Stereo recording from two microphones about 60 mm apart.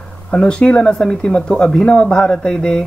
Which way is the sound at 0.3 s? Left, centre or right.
Centre.